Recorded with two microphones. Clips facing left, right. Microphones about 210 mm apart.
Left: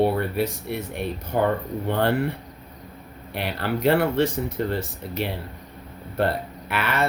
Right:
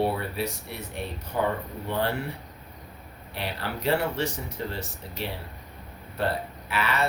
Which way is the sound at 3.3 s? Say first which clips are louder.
Left 6 dB; 60° left (ahead or behind).